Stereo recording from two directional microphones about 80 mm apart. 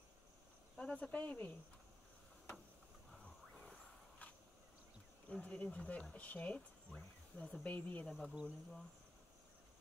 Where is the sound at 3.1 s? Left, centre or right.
Centre.